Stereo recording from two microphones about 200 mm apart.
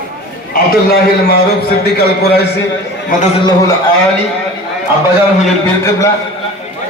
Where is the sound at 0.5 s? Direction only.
50° left (ahead or behind).